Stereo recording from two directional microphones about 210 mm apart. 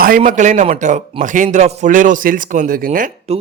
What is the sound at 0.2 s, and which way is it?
A man's voice, 35° right (ahead or behind).